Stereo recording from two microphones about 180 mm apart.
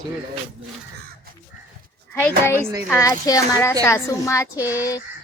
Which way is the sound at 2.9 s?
15° left (ahead or behind).